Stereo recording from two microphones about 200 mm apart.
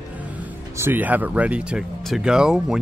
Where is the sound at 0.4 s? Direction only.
10° right (ahead or behind).